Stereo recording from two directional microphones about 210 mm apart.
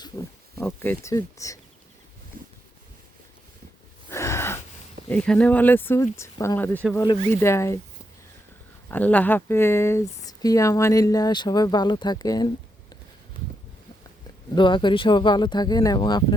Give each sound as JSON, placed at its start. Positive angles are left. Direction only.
{"t": 0.5, "sound": "speech", "side_deg": 10}
{"t": 2.3, "sound": "boat", "side_deg": -40}
{"t": 4.1, "sound": "gasp", "side_deg": 15}
{"t": 5.0, "sound": "speech", "side_deg": 5}
{"t": 8.9, "sound": "speech", "side_deg": 5}
{"t": 14.5, "sound": "speech", "side_deg": 20}